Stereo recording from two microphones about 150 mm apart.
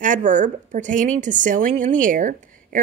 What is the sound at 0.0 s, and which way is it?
Speech, 55° right (ahead or behind).